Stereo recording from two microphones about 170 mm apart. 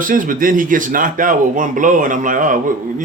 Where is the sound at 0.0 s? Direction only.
50° right (ahead or behind).